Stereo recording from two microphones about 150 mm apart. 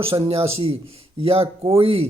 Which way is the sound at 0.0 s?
40° right (ahead or behind).